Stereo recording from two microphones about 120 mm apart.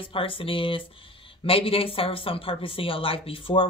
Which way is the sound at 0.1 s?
50° left (ahead or behind).